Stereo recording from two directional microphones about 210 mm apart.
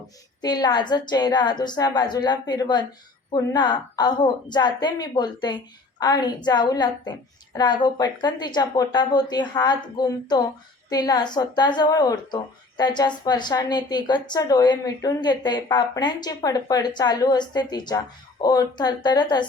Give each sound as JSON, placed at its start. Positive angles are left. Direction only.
{"t": 0.4, "sound": "speech", "side_deg": 20}